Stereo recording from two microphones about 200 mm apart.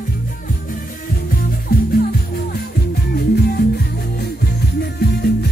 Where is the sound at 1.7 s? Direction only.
45° left (ahead or behind).